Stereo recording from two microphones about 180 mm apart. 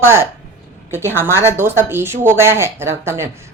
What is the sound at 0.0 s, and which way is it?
Speech, 15° right (ahead or behind).